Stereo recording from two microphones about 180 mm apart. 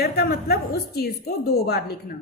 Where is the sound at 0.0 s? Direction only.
60° left (ahead or behind).